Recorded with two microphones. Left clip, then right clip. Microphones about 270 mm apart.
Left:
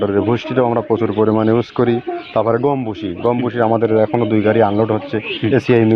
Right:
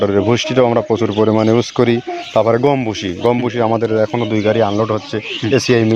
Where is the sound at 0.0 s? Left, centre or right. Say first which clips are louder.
Right 2 dB; right.